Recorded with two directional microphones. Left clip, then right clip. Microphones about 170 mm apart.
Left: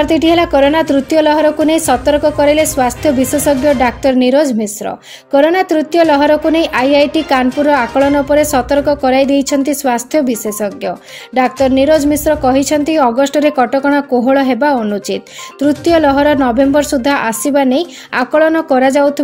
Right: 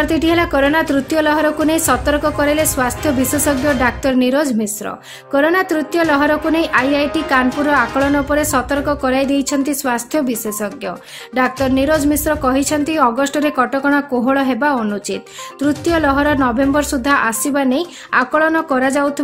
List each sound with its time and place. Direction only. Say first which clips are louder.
0.0 s a woman's voice: left 4 dB; 5° left (ahead or behind)